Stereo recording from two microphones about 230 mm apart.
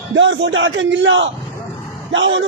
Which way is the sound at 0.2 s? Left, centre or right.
Right.